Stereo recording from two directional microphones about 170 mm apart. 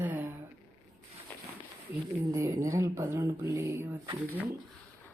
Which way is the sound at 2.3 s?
15° right (ahead or behind).